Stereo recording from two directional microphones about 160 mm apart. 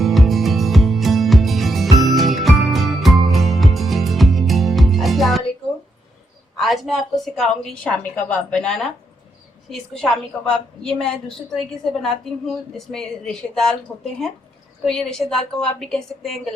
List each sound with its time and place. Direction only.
0.0 s music: centre (ahead or behind)
6.6 s a woman's voice: centre (ahead or behind)